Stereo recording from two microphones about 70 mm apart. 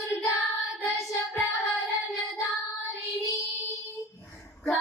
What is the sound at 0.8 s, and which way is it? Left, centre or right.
Child singing, centre.